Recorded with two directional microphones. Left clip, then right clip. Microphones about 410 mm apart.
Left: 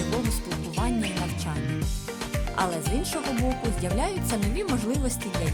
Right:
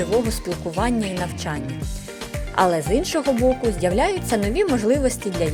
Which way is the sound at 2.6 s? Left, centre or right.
Left.